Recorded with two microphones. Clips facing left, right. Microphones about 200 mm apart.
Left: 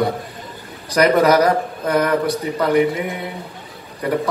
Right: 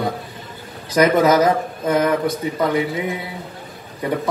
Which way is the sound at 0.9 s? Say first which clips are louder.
Left 1 dB; 20° right (ahead or behind).